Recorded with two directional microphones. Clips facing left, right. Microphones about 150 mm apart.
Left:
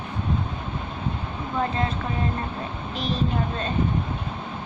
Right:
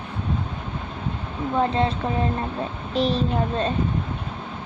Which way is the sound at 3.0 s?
35° right (ahead or behind).